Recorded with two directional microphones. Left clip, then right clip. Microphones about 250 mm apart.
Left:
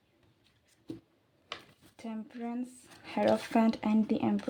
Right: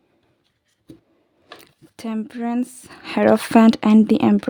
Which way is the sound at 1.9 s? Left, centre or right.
Right.